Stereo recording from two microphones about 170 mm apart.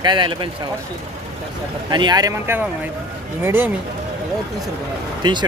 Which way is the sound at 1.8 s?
25° right (ahead or behind).